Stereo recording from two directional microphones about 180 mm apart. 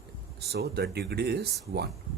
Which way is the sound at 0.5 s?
65° right (ahead or behind).